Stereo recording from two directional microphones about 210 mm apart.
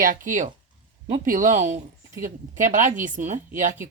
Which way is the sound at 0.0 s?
40° right (ahead or behind).